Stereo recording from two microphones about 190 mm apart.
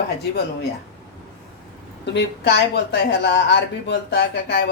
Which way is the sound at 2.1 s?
60° left (ahead or behind).